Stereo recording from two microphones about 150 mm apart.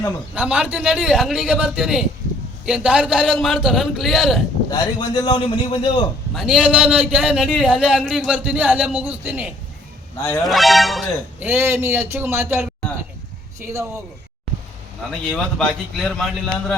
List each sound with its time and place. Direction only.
0.3 s speech: 5° right (ahead or behind)
4.7 s a man's voice: 30° left (ahead or behind)
6.3 s a man's voice: 5° right (ahead or behind)
10.2 s speech: 20° left (ahead or behind)
10.4 s speech: centre (ahead or behind)
11.3 s a man's voice: 10° right (ahead or behind)
15.3 s speech: 5° left (ahead or behind)